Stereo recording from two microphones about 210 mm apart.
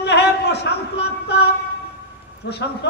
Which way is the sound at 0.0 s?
55° left (ahead or behind).